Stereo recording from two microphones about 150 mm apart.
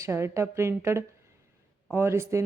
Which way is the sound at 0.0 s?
20° right (ahead or behind).